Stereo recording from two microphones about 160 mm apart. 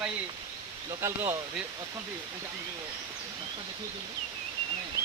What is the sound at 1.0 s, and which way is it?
Speech, 20° right (ahead or behind).